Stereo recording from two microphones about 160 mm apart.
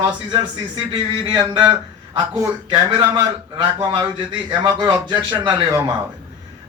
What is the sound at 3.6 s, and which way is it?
A man's voice, 25° right (ahead or behind).